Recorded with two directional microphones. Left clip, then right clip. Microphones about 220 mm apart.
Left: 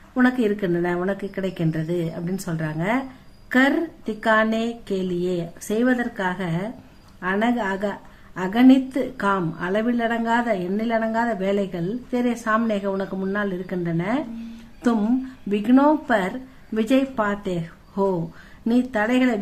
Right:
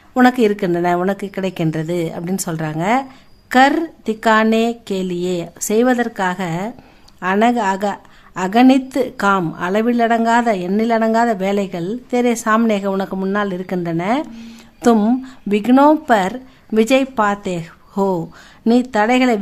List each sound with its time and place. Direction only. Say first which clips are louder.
0.1 s a woman's voice: right 8 dB; 45° right (ahead or behind)